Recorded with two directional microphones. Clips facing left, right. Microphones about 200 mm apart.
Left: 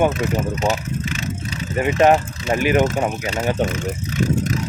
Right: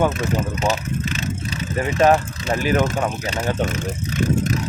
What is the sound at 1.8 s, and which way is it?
Speech, 15° left (ahead or behind).